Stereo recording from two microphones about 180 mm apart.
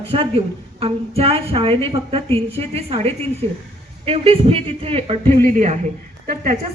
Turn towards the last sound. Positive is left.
turn(degrees=-45)  # may be behind; listen again after turning